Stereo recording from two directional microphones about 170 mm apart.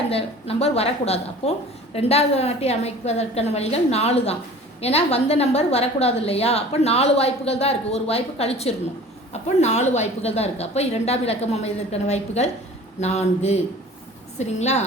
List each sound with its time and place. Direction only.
0.1 s a woman's voice: 35° left (ahead or behind)